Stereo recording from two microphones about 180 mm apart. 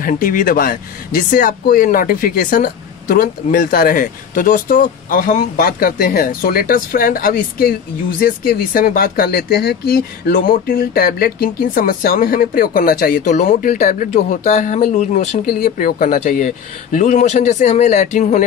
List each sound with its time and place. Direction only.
0.0 s speech: 50° left (ahead or behind)